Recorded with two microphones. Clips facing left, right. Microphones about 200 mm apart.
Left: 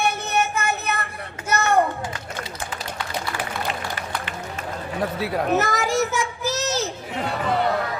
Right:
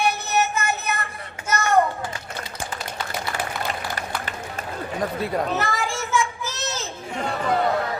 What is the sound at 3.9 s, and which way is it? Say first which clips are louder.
Run: even; 40° right (ahead or behind).